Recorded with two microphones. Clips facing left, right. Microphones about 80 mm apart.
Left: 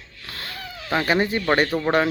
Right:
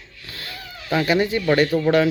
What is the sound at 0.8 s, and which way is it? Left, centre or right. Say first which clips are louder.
Speech: right 2 dB; left.